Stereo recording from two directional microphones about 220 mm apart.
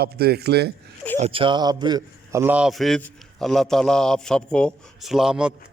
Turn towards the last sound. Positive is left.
turn(degrees=-5)  # may be behind; listen again after turning